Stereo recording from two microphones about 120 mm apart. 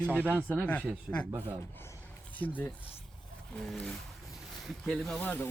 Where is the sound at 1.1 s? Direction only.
5° right (ahead or behind).